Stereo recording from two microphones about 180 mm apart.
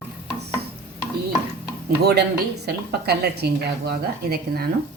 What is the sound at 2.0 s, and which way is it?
A woman's voice, 65° right (ahead or behind).